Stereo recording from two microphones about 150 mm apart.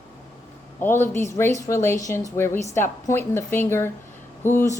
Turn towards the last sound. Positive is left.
turn(degrees=15)  # may be behind; listen again after turning